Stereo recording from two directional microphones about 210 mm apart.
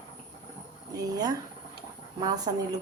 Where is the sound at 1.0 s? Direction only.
15° right (ahead or behind).